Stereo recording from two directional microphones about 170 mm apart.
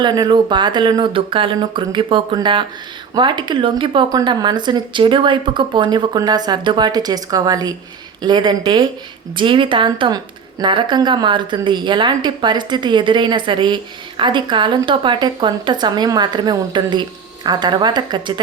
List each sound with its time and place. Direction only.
0.0 s speech: 25° right (ahead or behind)